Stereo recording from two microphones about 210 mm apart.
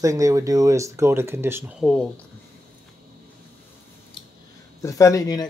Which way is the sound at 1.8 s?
5° left (ahead or behind).